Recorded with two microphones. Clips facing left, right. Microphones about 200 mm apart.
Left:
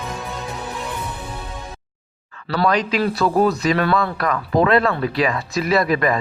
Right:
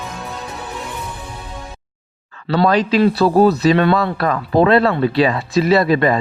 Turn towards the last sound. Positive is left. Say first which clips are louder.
# right 4 dB
turn(degrees=-30)  # may be behind; listen again after turning